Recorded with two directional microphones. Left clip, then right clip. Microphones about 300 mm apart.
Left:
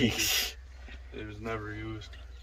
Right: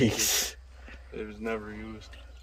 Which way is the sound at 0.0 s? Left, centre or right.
Centre.